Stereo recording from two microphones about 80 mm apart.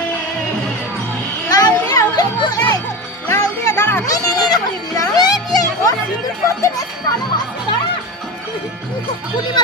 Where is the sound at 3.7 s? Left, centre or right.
Left.